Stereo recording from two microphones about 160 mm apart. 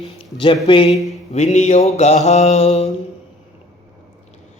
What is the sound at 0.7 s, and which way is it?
Speech, 35° left (ahead or behind).